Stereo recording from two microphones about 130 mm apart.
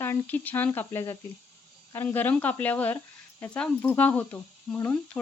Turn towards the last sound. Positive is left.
turn(degrees=15)  # may be behind; listen again after turning